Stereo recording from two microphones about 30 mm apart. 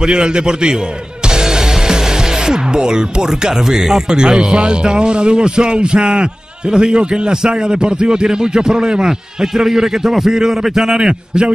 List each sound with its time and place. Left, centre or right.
0.0 s a man's voice: right
1.2 s music: right
4.1 s a man's voice: right
11.0 s a man's voice: right